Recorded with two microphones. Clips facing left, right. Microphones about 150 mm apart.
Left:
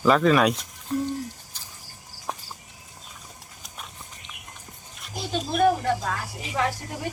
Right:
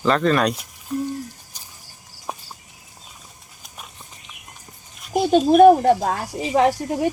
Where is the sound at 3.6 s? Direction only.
5° right (ahead or behind).